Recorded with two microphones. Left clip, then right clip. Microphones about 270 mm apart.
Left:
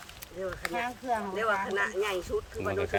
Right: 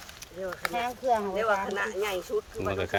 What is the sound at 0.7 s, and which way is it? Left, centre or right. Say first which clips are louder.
Speech: right 6 dB; right.